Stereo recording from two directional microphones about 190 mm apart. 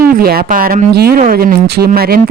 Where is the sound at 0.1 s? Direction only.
50° right (ahead or behind).